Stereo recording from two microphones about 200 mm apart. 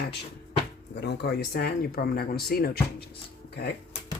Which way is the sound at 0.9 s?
55° left (ahead or behind).